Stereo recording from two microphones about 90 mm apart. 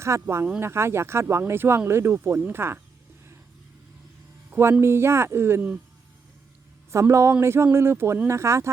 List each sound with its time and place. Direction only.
0.0 s speech: 30° right (ahead or behind)
4.8 s speech: 30° right (ahead or behind)
6.9 s speech: 30° right (ahead or behind)